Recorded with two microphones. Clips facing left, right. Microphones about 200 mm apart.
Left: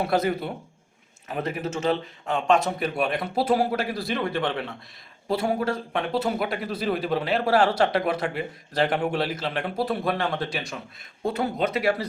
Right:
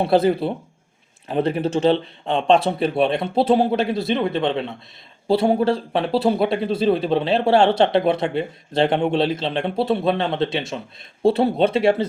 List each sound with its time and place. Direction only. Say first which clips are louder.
0.0 s speech: right 7 dB; 30° right (ahead or behind)